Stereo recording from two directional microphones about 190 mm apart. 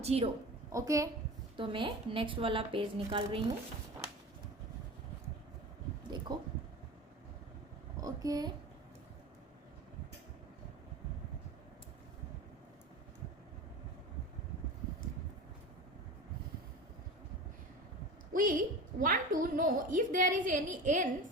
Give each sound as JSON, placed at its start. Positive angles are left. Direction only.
{"t": 0.0, "sound": "a woman's voice", "side_deg": -30}
{"t": 0.7, "sound": "a woman's voice", "side_deg": -15}
{"t": 6.1, "sound": "speech", "side_deg": -25}
{"t": 8.0, "sound": "a woman's voice", "side_deg": -20}
{"t": 18.3, "sound": "a woman's voice", "side_deg": -45}